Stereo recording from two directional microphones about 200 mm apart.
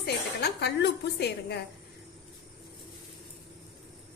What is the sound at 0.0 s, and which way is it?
A woman's voice, 55° left (ahead or behind).